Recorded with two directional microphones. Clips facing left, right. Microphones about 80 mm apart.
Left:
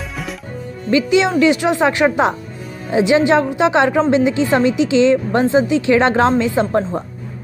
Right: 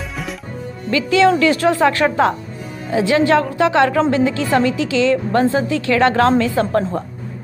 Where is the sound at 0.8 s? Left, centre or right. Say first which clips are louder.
Right 1 dB; left.